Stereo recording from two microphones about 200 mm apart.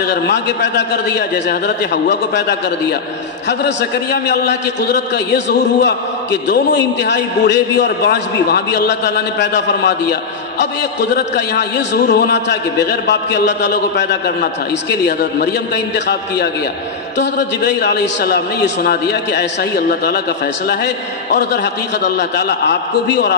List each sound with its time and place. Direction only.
0.0 s a man's voice: 60° left (ahead or behind)
20.6 s a man's voice: 55° left (ahead or behind)